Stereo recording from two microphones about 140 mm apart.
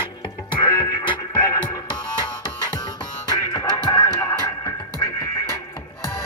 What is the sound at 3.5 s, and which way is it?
Music, 25° left (ahead or behind).